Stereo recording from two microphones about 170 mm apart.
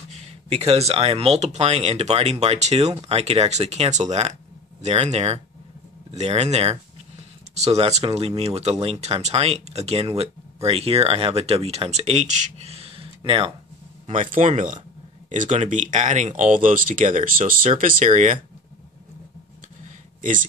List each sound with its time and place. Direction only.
0.1 s speech: 40° right (ahead or behind)
14.0 s speech: 50° right (ahead or behind)
19.8 s a sound: 50° right (ahead or behind)